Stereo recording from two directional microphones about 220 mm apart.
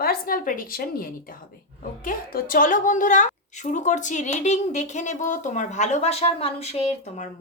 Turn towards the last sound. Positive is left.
turn(degrees=35)  # may be behind; listen again after turning